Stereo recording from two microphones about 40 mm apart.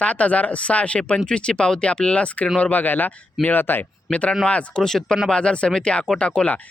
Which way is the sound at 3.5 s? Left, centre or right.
Left.